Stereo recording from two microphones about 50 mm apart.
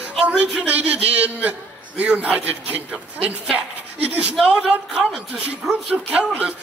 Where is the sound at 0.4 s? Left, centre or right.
Right.